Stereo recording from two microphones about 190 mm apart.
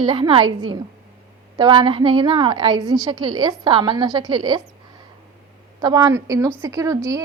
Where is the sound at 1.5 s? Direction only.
25° right (ahead or behind).